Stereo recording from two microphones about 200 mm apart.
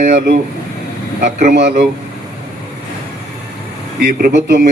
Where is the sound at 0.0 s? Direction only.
45° right (ahead or behind).